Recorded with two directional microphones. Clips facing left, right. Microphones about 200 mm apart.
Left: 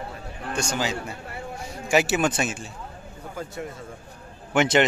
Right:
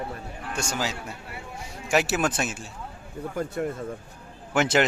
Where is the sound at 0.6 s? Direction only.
5° right (ahead or behind).